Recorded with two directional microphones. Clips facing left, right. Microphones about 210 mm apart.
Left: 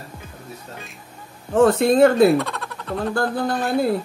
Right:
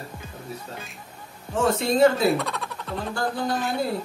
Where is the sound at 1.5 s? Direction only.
55° left (ahead or behind).